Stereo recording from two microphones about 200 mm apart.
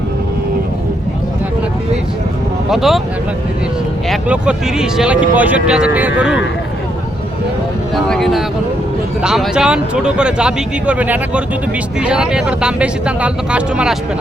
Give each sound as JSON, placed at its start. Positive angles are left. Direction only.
{"t": 2.6, "sound": "speech", "side_deg": 0}
{"t": 4.1, "sound": "speech", "side_deg": -5}
{"t": 7.9, "sound": "speech", "side_deg": 0}